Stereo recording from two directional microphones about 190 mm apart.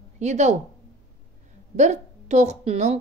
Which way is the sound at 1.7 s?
35° right (ahead or behind).